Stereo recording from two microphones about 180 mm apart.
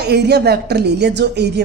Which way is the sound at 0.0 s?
65° right (ahead or behind).